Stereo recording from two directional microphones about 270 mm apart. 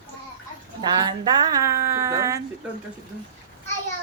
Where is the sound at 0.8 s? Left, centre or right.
Centre.